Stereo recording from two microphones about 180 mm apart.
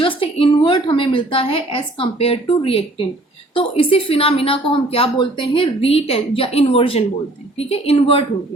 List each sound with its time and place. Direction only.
0.0 s a woman's voice: 30° left (ahead or behind)